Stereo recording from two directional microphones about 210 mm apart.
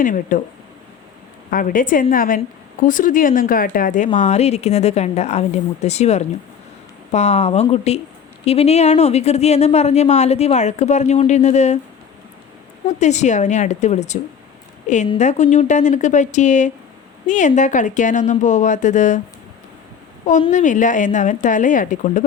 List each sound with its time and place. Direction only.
0.0 s speech: 40° left (ahead or behind)
1.5 s speech: 40° left (ahead or behind)
13.0 s speech: 35° left (ahead or behind)
20.2 s speech: 35° left (ahead or behind)